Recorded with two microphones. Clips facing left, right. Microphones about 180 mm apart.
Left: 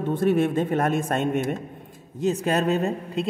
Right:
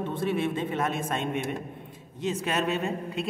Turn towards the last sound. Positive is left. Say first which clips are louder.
# left 5 dB
turn(degrees=40)  # may be behind; listen again after turning